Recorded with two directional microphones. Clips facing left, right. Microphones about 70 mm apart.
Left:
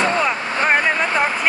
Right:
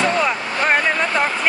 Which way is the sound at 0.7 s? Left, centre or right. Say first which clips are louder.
Even; centre.